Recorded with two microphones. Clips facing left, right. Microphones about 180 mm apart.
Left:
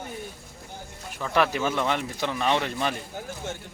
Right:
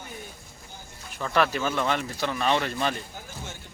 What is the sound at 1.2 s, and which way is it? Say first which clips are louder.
Speech: left 1 dB; 15° left (ahead or behind).